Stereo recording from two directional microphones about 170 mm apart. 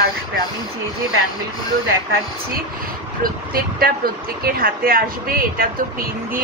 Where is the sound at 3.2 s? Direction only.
60° right (ahead or behind).